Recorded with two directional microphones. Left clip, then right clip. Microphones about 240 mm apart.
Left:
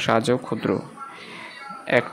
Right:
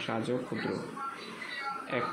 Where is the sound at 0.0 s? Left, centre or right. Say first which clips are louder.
Left 13 dB; left.